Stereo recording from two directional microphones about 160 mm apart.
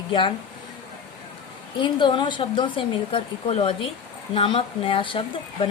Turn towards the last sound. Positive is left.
turn(degrees=30)  # may be behind; listen again after turning